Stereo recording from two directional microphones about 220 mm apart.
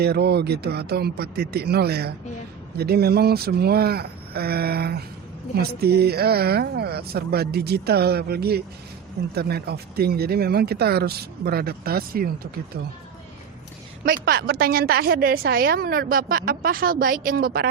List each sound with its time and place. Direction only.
0.0 s a woman's voice: 45° right (ahead or behind)
14.0 s a woman's voice: 40° right (ahead or behind)